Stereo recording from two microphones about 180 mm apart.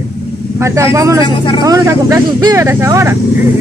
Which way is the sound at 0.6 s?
15° right (ahead or behind).